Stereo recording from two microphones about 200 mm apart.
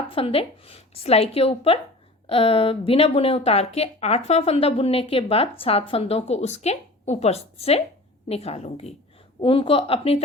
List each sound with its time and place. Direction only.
0.1 s a woman's voice: 30° left (ahead or behind)